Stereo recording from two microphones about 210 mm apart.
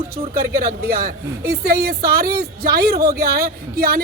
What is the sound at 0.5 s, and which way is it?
A man's voice, 45° right (ahead or behind).